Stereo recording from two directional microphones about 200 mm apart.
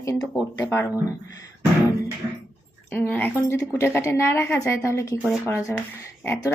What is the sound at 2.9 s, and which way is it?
Speech, 10° left (ahead or behind).